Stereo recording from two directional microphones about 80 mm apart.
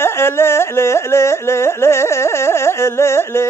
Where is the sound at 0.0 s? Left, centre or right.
Left.